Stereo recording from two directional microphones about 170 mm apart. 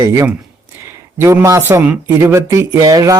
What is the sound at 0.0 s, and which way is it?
Speech, 20° right (ahead or behind).